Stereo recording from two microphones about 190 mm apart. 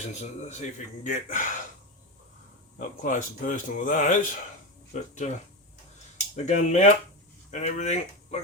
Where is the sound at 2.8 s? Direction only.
45° left (ahead or behind).